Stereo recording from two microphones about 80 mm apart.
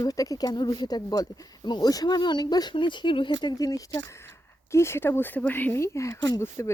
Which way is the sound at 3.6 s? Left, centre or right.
Left.